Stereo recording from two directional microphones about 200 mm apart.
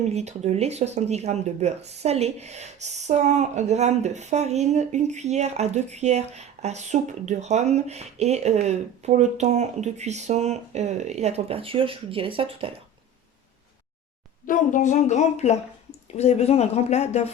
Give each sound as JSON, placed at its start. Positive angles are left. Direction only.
{"t": 0.0, "sound": "speech", "side_deg": -35}
{"t": 14.4, "sound": "speech", "side_deg": 40}